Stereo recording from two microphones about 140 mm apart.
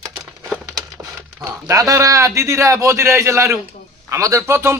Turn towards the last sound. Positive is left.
turn(degrees=-20)  # may be behind; listen again after turning